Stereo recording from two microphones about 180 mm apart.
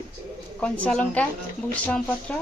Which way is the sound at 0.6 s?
5° left (ahead or behind).